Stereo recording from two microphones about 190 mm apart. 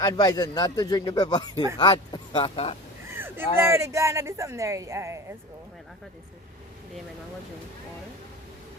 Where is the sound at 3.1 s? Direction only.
10° right (ahead or behind).